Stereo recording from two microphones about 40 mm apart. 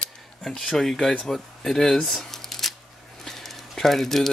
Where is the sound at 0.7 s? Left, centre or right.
Centre.